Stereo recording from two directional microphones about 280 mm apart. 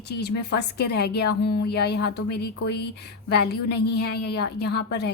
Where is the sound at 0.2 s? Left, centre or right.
Left.